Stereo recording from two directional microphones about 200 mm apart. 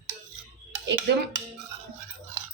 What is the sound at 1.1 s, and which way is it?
Speech, 60° right (ahead or behind).